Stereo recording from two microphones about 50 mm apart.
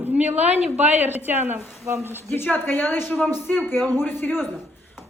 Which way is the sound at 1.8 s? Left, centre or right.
Right.